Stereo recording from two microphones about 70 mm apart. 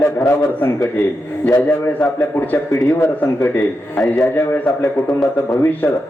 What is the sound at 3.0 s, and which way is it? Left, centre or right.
A man's voice, left.